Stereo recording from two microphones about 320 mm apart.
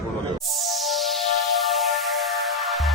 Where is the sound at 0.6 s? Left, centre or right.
Centre.